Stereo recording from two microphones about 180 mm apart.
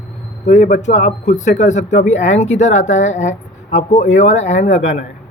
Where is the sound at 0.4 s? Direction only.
40° left (ahead or behind).